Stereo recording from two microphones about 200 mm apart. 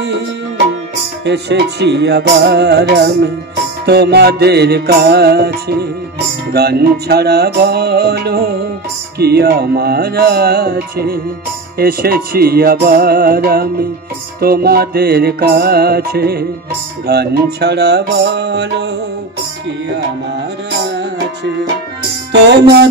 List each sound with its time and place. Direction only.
1.2 s music: 60° right (ahead or behind)
22.3 s music: 55° right (ahead or behind)